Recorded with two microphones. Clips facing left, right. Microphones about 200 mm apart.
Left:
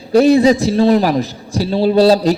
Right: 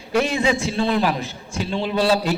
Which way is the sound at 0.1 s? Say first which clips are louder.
Left 10 dB; 35° left (ahead or behind).